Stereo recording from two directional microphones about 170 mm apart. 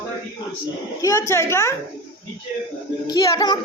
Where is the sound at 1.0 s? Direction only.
20° left (ahead or behind).